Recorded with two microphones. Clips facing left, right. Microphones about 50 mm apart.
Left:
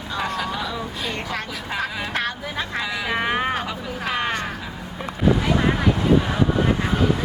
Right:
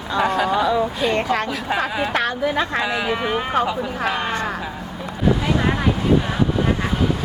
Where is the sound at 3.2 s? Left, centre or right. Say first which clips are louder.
Even; centre.